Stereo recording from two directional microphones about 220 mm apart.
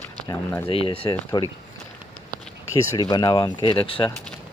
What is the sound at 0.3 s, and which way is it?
Speech, 10° left (ahead or behind).